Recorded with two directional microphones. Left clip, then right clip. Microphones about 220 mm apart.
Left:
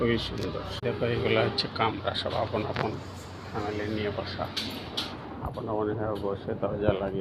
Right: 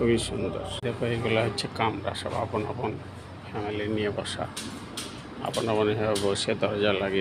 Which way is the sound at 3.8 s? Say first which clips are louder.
Right 5 dB; 50° right (ahead or behind).